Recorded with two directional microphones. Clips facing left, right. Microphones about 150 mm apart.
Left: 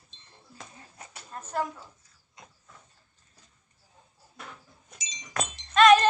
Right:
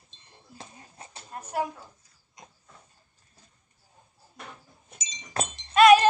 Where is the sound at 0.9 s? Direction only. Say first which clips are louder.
Right 1 dB; 30° right (ahead or behind).